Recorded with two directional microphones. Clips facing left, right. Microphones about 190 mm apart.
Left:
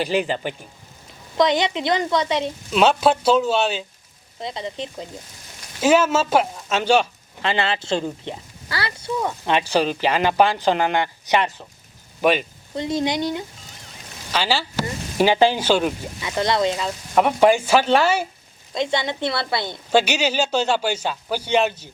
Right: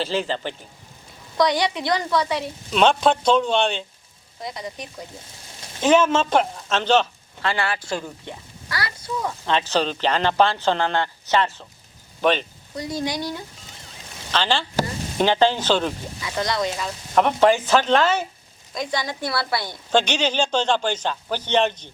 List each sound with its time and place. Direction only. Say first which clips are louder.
0.0 s a woman's voice: left 3 dB; 15° left (ahead or behind)
2.7 s speech: left 1 dB; 5° left (ahead or behind)
4.4 s a woman's voice: left 3 dB; 25° left (ahead or behind)
5.8 s speech: even; 5° left (ahead or behind); by 9.3 s 25° left (ahead or behind)
9.5 s speech: left 2 dB; 10° left (ahead or behind)
12.7 s a woman's voice: left 4 dB; 25° left (ahead or behind)
14.3 s speech: even; 10° left (ahead or behind)
16.2 s a woman's voice: left 4 dB; 25° left (ahead or behind)
17.2 s speech: left 1 dB; 10° left (ahead or behind)
18.7 s a woman's voice: left 4 dB; 25° left (ahead or behind)
19.9 s speech: left 2 dB; 10° left (ahead or behind)